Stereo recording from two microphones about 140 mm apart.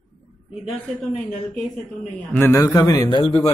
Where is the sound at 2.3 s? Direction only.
15° left (ahead or behind); by 3.4 s 35° left (ahead or behind).